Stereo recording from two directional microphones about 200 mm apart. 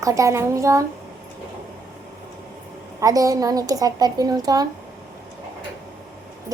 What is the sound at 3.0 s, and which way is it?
A child's voice, 15° right (ahead or behind).